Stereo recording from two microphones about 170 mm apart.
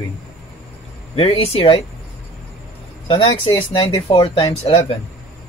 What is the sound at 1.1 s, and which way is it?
Speech, 35° left (ahead or behind).